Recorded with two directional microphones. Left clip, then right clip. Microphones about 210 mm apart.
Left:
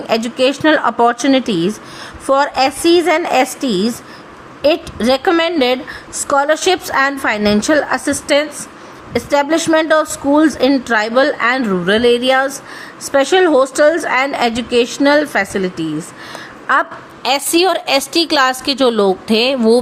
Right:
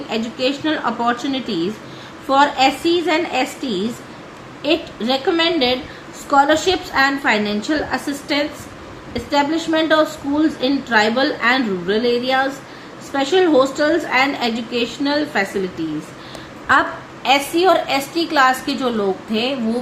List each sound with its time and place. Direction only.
0.1 s a woman's voice: 50° left (ahead or behind)
17.2 s a woman's voice: 55° left (ahead or behind)